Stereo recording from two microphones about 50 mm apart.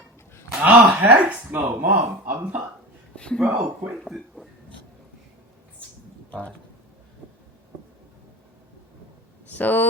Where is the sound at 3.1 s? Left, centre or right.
Centre.